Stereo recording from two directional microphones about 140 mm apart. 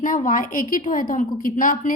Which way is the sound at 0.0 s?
75° left (ahead or behind).